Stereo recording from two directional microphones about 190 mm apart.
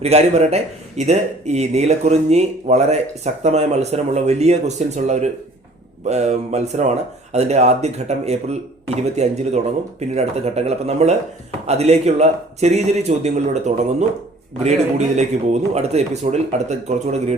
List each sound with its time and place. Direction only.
0.0 s speech: 35° right (ahead or behind)